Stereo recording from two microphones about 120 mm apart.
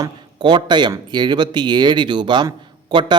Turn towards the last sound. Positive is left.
turn(degrees=-40)  # may be behind; listen again after turning